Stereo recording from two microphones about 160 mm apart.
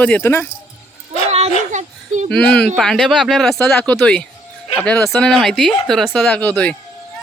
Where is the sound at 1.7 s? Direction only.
50° right (ahead or behind).